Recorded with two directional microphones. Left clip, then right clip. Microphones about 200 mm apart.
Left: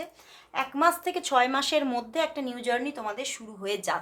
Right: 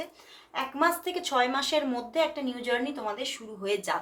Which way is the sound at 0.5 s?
30° left (ahead or behind).